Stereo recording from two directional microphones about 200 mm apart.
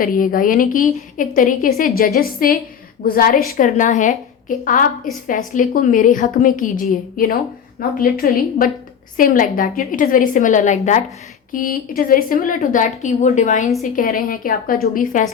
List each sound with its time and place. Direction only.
0.0 s a woman's voice: 45° left (ahead or behind)